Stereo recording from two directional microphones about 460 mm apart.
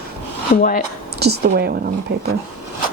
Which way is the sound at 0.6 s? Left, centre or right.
Centre.